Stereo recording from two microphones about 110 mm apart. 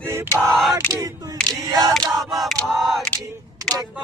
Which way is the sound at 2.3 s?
Centre (ahead or behind).